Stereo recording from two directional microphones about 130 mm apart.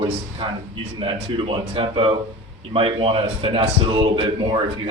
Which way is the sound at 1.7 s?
45° right (ahead or behind).